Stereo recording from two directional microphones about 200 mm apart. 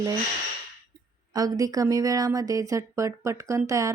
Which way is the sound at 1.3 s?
20° right (ahead or behind).